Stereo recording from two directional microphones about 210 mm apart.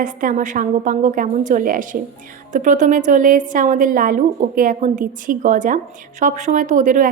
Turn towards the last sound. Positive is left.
turn(degrees=-40)  # may be behind; listen again after turning